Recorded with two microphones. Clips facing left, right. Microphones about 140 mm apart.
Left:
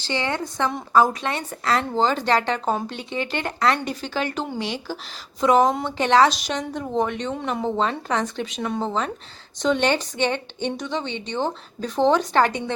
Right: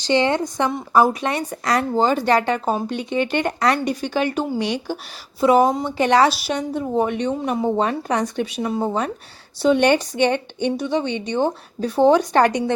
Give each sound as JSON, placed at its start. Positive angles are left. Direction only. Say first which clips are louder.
{"t": 0.0, "sound": "speech", "louder": "right 7 dB", "side_deg": -20}